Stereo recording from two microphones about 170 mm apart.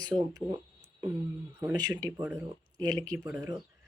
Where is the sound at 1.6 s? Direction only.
20° right (ahead or behind).